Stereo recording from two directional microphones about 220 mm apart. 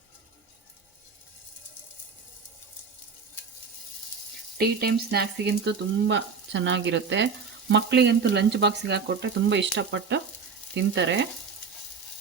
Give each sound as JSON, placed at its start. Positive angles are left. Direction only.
{"t": 4.5, "sound": "frying", "side_deg": -45}